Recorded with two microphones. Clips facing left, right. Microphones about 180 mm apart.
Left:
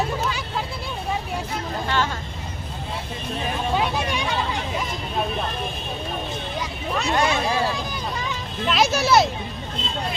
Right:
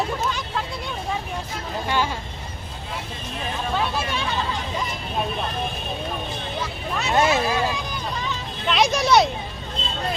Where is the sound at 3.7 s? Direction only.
15° left (ahead or behind).